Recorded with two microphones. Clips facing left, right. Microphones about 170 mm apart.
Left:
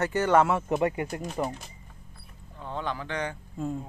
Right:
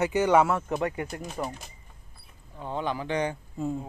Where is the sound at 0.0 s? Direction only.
15° right (ahead or behind).